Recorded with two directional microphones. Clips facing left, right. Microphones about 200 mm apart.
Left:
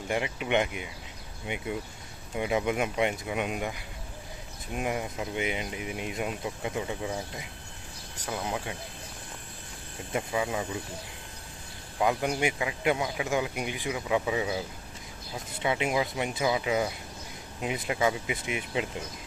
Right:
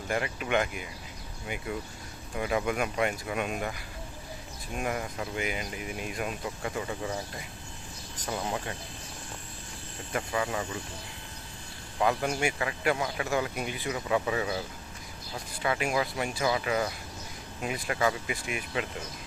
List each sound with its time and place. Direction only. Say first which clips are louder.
0.1 s speech: left 1 dB; 20° left (ahead or behind)
10.1 s speech: left 1 dB; 15° left (ahead or behind)
11.9 s speech: left 1 dB; 15° left (ahead or behind)